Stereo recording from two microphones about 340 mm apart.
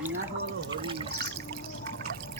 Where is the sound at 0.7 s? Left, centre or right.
Centre.